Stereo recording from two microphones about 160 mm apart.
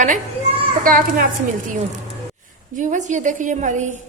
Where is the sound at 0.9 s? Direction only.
60° right (ahead or behind).